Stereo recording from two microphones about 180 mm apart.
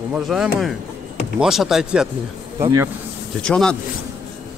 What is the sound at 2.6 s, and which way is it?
Speech, 15° right (ahead or behind).